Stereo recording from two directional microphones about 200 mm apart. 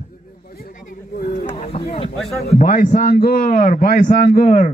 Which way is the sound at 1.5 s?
30° left (ahead or behind).